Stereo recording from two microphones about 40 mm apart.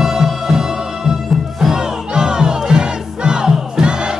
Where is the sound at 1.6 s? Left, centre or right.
Centre.